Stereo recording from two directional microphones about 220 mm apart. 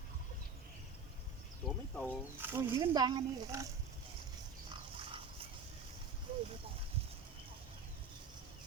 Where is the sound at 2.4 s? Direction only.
10° right (ahead or behind).